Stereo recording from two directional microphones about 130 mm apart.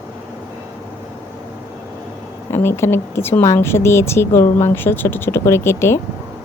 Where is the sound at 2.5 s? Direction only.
20° left (ahead or behind).